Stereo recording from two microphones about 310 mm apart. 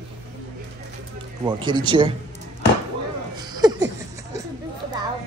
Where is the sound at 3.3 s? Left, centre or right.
Centre.